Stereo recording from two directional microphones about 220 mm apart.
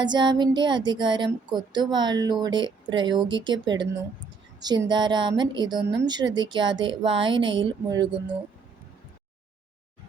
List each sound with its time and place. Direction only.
0.0 s speech: 20° right (ahead or behind)